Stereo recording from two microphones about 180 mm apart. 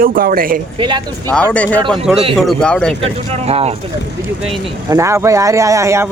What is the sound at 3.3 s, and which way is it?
Speech, 35° right (ahead or behind).